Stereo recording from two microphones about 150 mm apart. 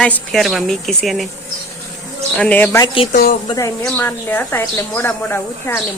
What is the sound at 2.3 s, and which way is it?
Speech, 10° left (ahead or behind).